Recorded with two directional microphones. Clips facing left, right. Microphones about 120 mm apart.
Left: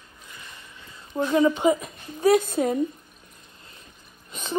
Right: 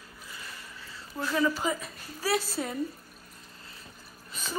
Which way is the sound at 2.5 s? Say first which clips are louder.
Left 10 dB; 45° left (ahead or behind).